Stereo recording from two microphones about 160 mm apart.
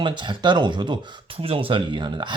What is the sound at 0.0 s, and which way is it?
Speech, 30° right (ahead or behind).